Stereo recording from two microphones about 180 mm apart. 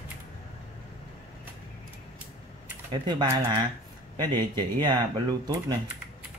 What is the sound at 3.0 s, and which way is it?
Speech, 25° right (ahead or behind).